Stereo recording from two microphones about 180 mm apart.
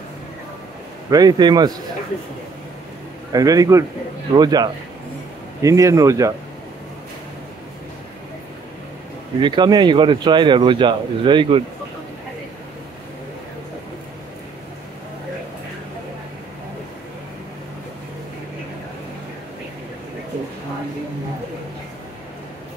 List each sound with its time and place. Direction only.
1.1 s speech: 20° right (ahead or behind)
3.3 s speech: 20° right (ahead or behind)
9.4 s speech: 25° right (ahead or behind)